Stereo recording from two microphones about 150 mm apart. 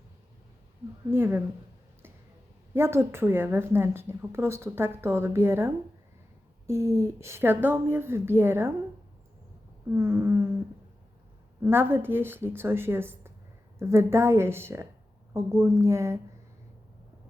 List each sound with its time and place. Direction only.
1.1 s a woman's voice: 15° right (ahead or behind)
2.7 s a woman's voice: 15° right (ahead or behind)
9.9 s a woman's voice: 15° right (ahead or behind)
11.6 s a woman's voice: 15° right (ahead or behind)